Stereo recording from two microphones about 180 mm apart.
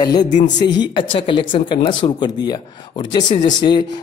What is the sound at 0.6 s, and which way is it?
Speech, 25° left (ahead or behind).